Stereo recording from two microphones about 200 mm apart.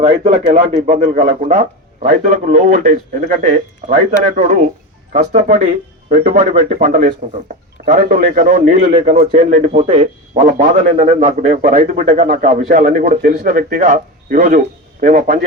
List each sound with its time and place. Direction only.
0.1 s a man's voice: 40° right (ahead or behind)